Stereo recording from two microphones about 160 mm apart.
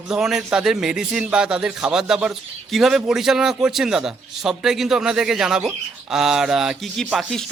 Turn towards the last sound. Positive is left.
turn(degrees=0)  # may be behind; listen again after turning